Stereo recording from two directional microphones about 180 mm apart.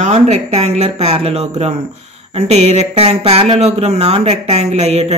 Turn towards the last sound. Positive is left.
turn(degrees=-35)  # may be behind; listen again after turning